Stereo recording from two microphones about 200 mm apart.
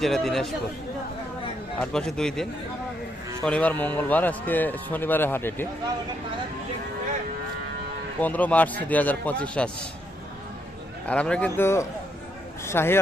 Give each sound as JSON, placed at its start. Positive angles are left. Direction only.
{"t": 0.0, "sound": "a man's voice", "side_deg": 0}
{"t": 1.8, "sound": "a man's voice", "side_deg": 5}
{"t": 8.2, "sound": "speech", "side_deg": 10}
{"t": 11.1, "sound": "speech", "side_deg": 5}